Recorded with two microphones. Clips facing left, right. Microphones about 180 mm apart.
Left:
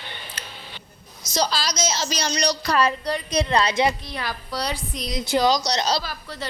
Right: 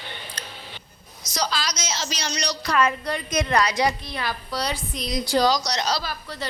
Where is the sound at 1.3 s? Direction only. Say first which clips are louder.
Left 3 dB; 30° left (ahead or behind).